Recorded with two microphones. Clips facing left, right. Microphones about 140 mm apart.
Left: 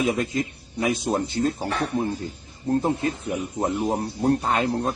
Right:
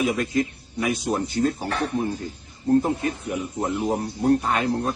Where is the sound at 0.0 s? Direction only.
25° left (ahead or behind).